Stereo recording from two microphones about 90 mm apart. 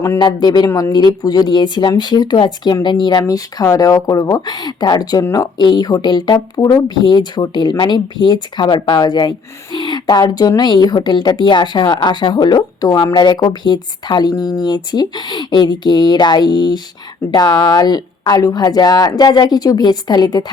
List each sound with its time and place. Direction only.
0.2 s speech: 55° left (ahead or behind)
3.2 s speech: 40° left (ahead or behind)